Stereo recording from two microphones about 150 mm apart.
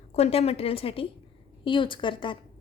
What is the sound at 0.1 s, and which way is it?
A woman's voice, 45° left (ahead or behind).